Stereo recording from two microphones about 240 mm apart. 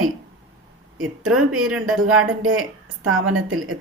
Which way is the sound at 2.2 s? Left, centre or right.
Right.